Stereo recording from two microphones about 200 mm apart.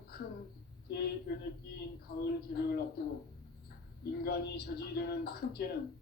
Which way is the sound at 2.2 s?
50° left (ahead or behind).